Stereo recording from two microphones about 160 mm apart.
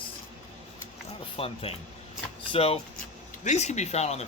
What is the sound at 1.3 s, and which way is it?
Speech, 35° left (ahead or behind).